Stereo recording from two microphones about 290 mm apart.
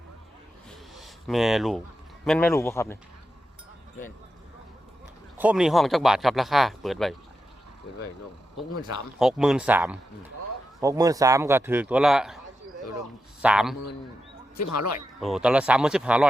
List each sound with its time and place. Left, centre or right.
0.7 s a sound: centre
2.2 s a man's voice: centre
5.4 s speech: centre
9.1 s a man's voice: centre
13.4 s speech: centre
14.6 s speech: left
15.2 s speech: centre